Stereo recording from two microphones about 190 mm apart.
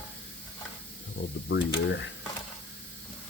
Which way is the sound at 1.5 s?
70° left (ahead or behind).